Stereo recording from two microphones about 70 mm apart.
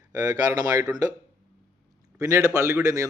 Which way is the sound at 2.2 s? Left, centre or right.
Right.